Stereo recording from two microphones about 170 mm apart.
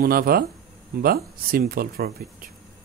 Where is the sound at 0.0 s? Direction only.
60° right (ahead or behind).